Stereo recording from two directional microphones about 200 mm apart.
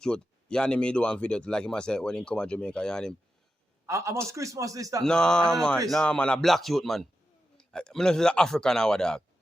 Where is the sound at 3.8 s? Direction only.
15° right (ahead or behind).